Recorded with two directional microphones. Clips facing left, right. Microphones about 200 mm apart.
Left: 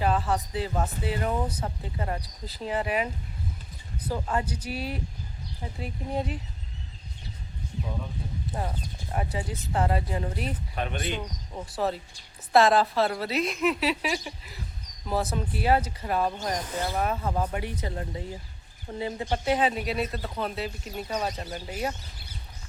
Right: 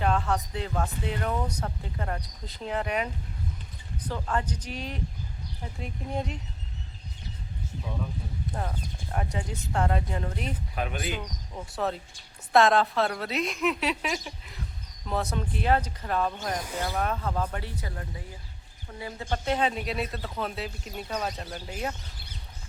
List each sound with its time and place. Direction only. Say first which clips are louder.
0.0 s speech: left 1 dB; 5° left (ahead or behind)
9.1 s speech: left 1 dB; 5° left (ahead or behind)
19.5 s speech: left 2 dB; 5° left (ahead or behind)